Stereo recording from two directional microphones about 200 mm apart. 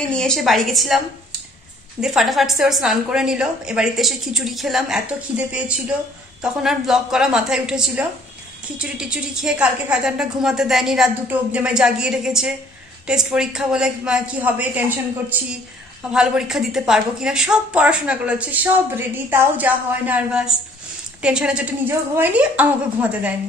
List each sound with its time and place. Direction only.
0.1 s a woman's voice: 5° left (ahead or behind)
16.1 s a woman's voice: 5° right (ahead or behind)